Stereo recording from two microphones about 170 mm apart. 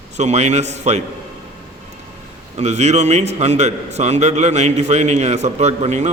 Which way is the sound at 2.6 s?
40° right (ahead or behind).